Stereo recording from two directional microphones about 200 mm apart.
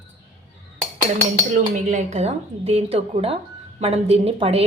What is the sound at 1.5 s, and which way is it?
A woman's voice, 35° right (ahead or behind).